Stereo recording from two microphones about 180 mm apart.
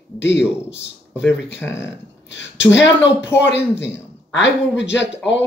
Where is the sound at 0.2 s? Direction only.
80° left.